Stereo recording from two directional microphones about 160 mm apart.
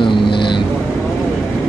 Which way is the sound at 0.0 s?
30° left (ahead or behind).